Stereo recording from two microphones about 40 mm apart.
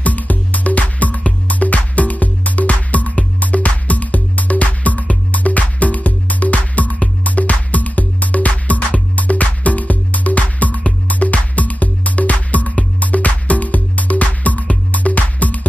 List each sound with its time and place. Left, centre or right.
0.0 s music: left